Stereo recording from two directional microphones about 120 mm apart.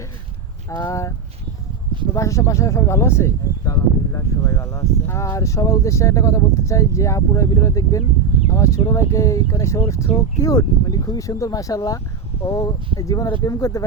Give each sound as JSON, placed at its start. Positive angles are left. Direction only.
{"t": 0.7, "sound": "speech", "side_deg": 25}
{"t": 2.1, "sound": "speech", "side_deg": 25}